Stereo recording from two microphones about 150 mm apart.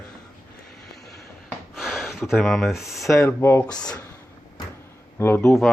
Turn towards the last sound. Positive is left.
turn(degrees=15)  # may be behind; listen again after turning